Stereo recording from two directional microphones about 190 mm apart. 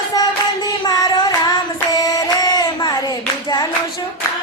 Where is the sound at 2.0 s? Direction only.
20° left (ahead or behind).